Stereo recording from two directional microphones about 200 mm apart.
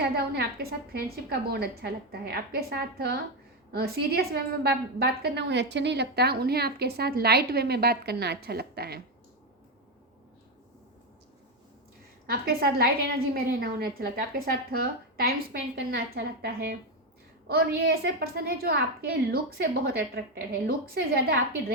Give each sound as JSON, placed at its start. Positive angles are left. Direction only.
{"t": 0.0, "sound": "a woman's voice", "side_deg": -50}
{"t": 12.2, "sound": "a woman's voice", "side_deg": -50}